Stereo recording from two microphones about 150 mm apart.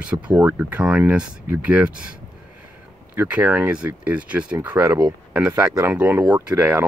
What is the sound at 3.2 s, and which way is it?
Speech, 10° right (ahead or behind).